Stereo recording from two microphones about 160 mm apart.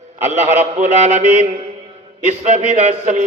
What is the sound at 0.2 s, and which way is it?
A man's voice, 45° right (ahead or behind).